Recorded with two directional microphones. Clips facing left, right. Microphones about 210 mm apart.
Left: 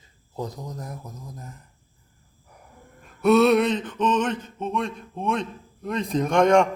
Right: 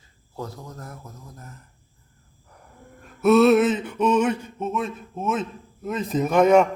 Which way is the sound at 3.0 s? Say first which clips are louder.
Right 1 dB; centre (ahead or behind).